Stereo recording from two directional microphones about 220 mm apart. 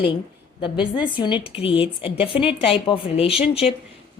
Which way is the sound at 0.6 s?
20° left (ahead or behind).